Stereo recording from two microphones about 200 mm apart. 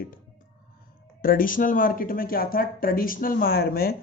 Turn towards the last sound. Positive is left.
turn(degrees=50)  # may be behind; listen again after turning